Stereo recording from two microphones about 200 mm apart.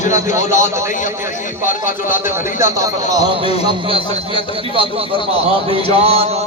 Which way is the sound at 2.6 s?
15° right (ahead or behind).